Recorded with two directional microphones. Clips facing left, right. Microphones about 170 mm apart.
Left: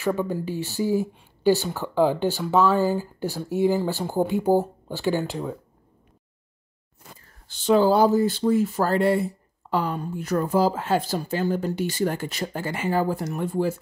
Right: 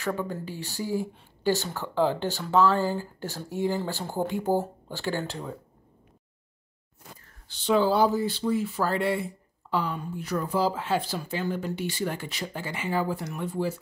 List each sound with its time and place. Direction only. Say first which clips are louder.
0.0 s speech: left 6 dB; 20° left (ahead or behind)
7.4 s speech: left 5 dB; 45° left (ahead or behind)